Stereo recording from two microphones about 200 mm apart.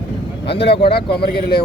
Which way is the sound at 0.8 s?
55° left (ahead or behind).